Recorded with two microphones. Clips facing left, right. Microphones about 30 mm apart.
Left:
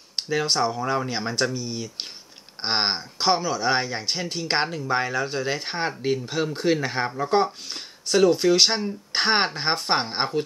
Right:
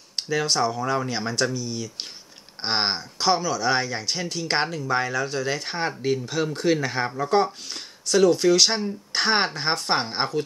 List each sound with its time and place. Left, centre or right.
0.1 s speech: centre
2.6 s speech: centre